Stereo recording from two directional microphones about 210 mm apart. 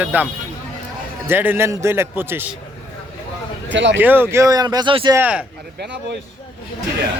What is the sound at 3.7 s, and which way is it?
Speech, 60° right (ahead or behind).